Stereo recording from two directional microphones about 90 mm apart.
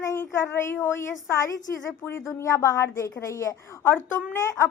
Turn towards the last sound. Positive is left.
turn(degrees=25)  # may be behind; listen again after turning